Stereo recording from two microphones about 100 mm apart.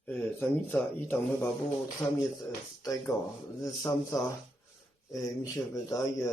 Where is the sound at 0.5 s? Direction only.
15° left (ahead or behind).